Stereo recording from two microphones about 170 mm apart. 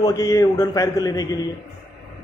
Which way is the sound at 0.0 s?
20° left (ahead or behind).